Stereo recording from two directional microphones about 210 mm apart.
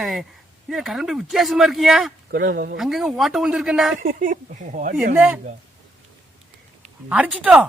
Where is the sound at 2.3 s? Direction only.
45° right (ahead or behind).